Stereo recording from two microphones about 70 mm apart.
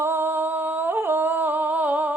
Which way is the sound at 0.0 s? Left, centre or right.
Right.